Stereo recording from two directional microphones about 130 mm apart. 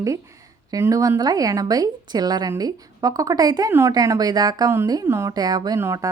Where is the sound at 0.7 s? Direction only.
25° right (ahead or behind).